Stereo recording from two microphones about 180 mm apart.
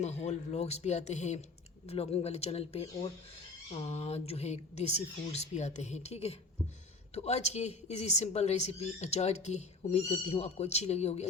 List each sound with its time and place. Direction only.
0.0 s speech: 40° left (ahead or behind)